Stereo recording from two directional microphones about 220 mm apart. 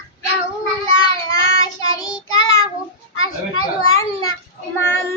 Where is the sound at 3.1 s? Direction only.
70° left (ahead or behind).